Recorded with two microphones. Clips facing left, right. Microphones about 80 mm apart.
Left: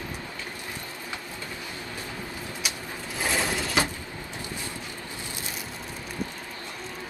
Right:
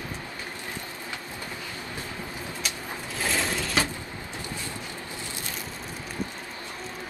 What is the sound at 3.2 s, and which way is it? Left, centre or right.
Sewing machine, centre.